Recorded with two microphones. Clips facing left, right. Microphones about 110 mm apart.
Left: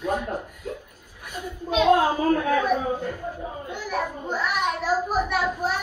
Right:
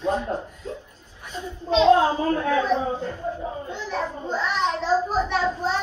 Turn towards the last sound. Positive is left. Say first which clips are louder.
# right 1 dB
turn(degrees=10)  # may be behind; listen again after turning